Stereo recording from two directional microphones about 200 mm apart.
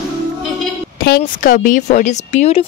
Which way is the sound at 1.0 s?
50° left (ahead or behind).